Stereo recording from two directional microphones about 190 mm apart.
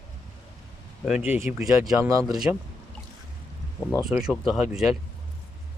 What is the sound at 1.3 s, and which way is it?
Speech, 10° right (ahead or behind).